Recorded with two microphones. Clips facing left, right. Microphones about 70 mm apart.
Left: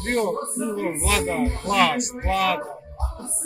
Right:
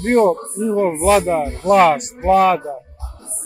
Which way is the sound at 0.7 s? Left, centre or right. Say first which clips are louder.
Right 12 dB; right.